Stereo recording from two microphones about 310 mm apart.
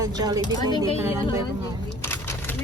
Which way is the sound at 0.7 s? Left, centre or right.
Centre.